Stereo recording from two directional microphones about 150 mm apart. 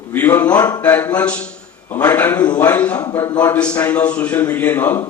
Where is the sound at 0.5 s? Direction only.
25° left (ahead or behind).